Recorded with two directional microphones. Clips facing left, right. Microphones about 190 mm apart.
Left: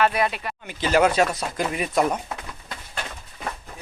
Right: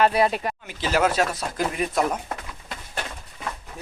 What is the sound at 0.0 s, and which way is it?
Speech, 35° right (ahead or behind).